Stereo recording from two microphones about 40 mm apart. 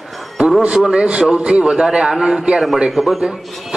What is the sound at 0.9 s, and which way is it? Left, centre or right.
A man's voice, right.